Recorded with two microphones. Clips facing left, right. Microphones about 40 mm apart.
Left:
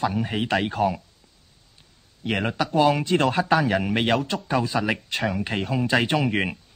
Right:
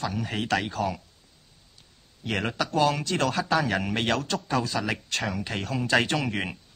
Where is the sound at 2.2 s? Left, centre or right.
Centre.